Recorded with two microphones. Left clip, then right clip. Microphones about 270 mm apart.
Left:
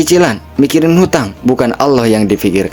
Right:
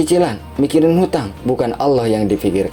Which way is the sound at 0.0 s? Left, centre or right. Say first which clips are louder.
Left 5 dB; left.